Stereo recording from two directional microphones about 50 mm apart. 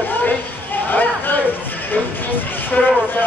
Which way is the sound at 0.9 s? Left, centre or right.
Left.